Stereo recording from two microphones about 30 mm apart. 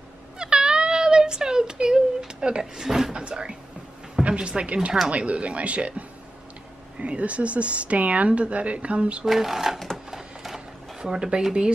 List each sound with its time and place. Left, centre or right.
0.4 s a sound: right
2.6 s speech: centre
3.2 s speech: right
5.1 s speech: right
9.2 s speech: centre
10.1 s printer: centre
11.0 s speech: right